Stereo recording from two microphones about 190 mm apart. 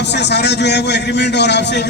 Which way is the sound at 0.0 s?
65° left (ahead or behind).